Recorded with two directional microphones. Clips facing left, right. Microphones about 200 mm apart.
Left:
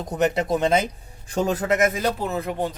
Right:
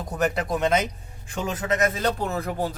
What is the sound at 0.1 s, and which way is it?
Speech, 20° left (ahead or behind).